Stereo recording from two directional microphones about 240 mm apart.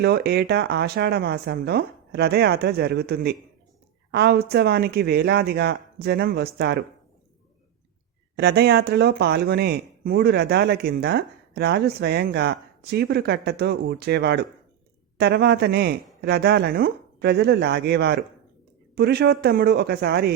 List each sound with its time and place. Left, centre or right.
0.0 s speech: right
8.4 s speech: right